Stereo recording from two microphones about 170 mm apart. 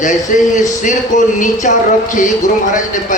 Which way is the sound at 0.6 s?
45° left (ahead or behind).